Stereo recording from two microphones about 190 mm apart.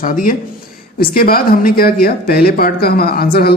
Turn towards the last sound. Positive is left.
turn(degrees=50)  # may be behind; listen again after turning